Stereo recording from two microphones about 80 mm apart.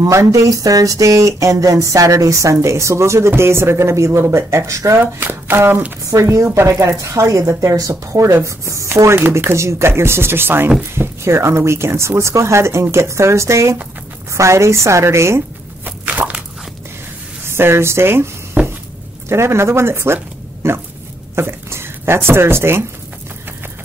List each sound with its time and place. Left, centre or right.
0.0 s speech: right
5.0 s speech: right
6.0 s speech: right
15.8 s walk: right
17.5 s speech: right